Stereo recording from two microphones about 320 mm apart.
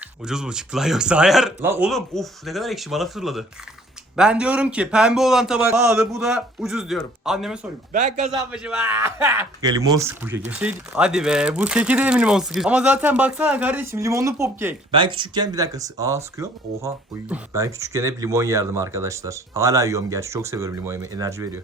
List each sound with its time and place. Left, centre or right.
0.3 s a man's voice: centre
8.0 s a man's voice: right
8.3 s speech: centre